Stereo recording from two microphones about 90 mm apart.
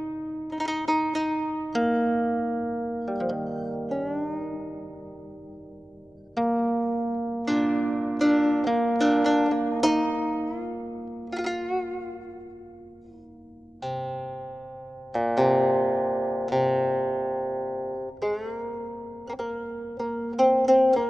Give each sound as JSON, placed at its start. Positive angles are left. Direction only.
{"t": 0.5, "sound": "music", "side_deg": 0}
{"t": 6.4, "sound": "music", "side_deg": 0}
{"t": 10.1, "sound": "music", "side_deg": -15}
{"t": 10.5, "sound": "music", "side_deg": 0}
{"t": 13.8, "sound": "music", "side_deg": 0}
{"t": 15.7, "sound": "music", "side_deg": -15}
{"t": 16.0, "sound": "music", "side_deg": 0}